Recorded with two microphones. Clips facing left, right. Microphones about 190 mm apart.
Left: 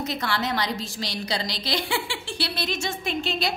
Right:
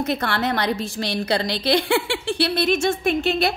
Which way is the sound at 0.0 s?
60° right (ahead or behind).